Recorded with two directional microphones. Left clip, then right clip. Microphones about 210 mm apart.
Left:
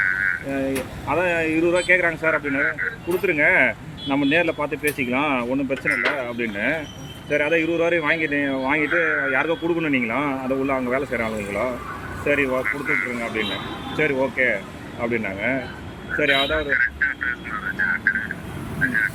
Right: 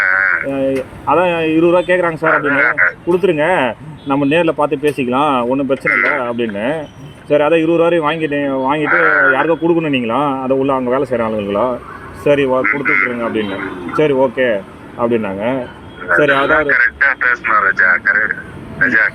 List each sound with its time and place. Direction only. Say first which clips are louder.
0.0 s frog: right 8 dB; 50° right (ahead or behind)
1.0 s a man's voice: right 8 dB; 40° right (ahead or behind)
8.8 s a man's voice: right 12 dB; 45° right (ahead or behind)
11.1 s speech: right 9 dB; 45° right (ahead or behind)
16.1 s speech: right 9 dB; 45° right (ahead or behind)